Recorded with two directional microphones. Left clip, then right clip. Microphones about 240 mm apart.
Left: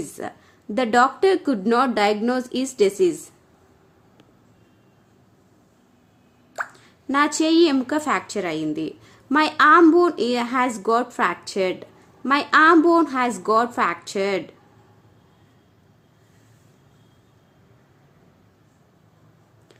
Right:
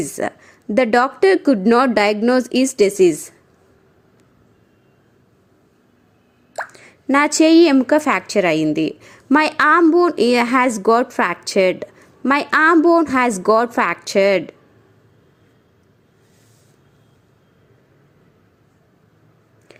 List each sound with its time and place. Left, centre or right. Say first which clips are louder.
0.0 s a woman's voice: right 9 dB; right
6.7 s a woman's voice: right 5 dB; right